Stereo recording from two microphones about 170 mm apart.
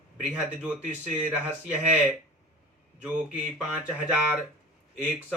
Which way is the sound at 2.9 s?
5° right (ahead or behind).